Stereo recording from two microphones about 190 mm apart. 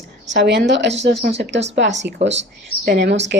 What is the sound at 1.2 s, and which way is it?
Speech, 45° right (ahead or behind).